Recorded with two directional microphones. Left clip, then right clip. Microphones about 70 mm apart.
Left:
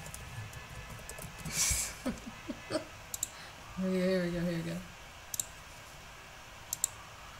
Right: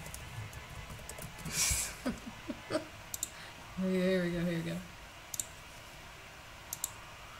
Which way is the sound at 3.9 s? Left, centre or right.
Centre.